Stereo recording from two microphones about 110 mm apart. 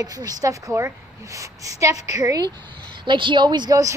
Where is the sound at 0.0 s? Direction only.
35° right (ahead or behind).